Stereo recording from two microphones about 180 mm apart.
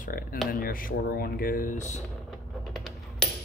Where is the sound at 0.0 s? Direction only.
50° left (ahead or behind).